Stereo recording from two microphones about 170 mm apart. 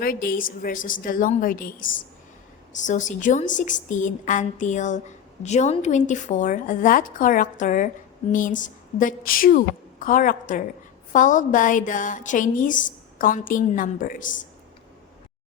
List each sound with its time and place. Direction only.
0.0 s a woman's voice: 60° left (ahead or behind)